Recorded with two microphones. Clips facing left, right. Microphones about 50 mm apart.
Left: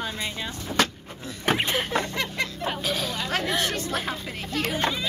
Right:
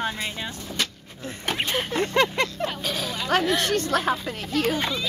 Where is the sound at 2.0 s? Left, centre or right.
Right.